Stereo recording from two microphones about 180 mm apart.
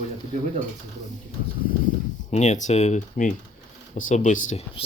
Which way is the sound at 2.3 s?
40° left (ahead or behind).